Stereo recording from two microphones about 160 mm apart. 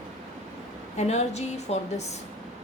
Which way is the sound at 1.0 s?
45° left (ahead or behind).